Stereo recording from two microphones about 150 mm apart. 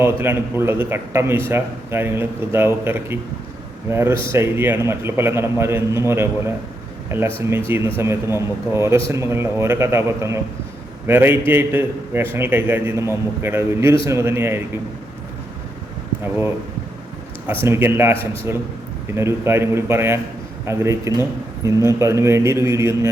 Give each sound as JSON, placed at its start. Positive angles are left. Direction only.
{"t": 0.0, "sound": "a man's voice", "side_deg": -15}
{"t": 17.7, "sound": "a man's voice", "side_deg": -15}